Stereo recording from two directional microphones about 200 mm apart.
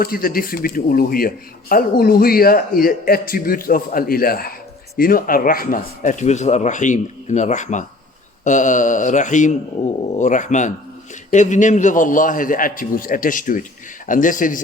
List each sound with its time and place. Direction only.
0.0 s a man's voice: 45° left (ahead or behind)